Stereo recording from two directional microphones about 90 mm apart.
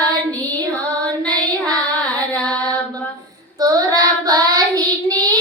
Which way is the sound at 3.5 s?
40° right (ahead or behind).